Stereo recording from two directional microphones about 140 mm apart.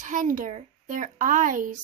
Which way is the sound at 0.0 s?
65° right (ahead or behind).